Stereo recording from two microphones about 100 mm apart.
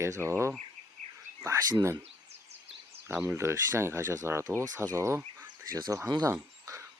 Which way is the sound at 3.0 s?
20° right (ahead or behind).